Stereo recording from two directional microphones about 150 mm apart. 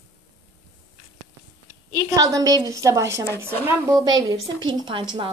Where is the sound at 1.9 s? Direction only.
25° right (ahead or behind).